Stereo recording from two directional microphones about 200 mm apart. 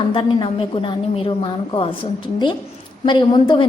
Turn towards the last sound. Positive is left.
turn(degrees=25)  # may be behind; listen again after turning